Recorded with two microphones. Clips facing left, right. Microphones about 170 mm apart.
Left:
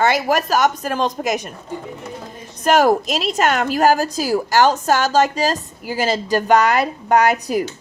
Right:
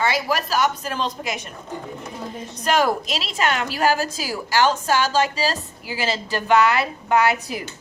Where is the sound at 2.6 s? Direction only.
45° left (ahead or behind).